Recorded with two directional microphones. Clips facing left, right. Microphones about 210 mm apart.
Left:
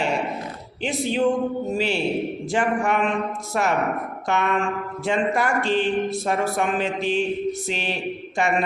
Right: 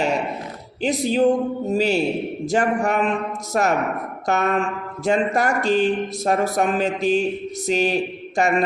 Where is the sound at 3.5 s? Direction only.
40° right (ahead or behind).